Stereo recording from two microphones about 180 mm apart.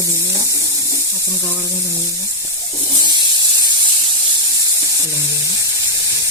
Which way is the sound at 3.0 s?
25° right (ahead or behind).